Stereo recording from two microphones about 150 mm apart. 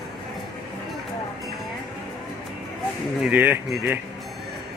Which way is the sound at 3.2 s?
10° right (ahead or behind).